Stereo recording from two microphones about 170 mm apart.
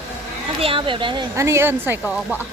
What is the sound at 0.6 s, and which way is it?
Speech, 30° right (ahead or behind).